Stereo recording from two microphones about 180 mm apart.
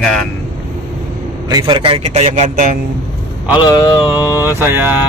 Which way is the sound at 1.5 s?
25° right (ahead or behind).